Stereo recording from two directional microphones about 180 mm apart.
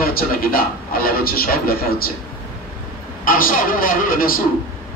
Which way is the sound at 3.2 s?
50° left (ahead or behind).